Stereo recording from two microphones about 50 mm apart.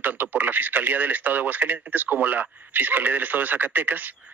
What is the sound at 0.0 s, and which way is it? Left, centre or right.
Speech, right.